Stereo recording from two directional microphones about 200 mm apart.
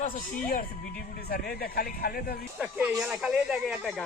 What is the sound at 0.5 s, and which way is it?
Speech, 45° left (ahead or behind).